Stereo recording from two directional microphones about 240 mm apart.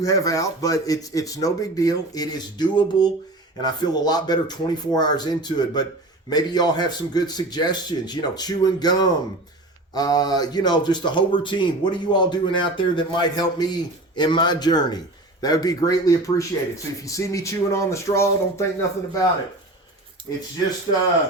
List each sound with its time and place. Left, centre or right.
0.0 s a man's voice: centre